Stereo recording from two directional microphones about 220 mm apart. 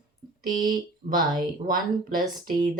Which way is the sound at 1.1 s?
40° right (ahead or behind).